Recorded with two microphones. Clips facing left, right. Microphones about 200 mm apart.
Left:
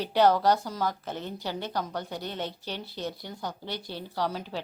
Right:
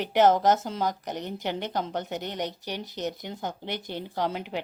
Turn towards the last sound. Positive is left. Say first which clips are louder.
# right 2 dB
turn(degrees=-20)  # may be behind; listen again after turning